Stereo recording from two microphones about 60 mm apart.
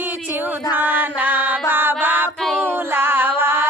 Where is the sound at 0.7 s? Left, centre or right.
Right.